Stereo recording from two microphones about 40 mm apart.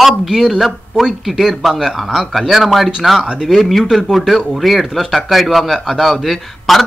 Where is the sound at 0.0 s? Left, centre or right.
Centre.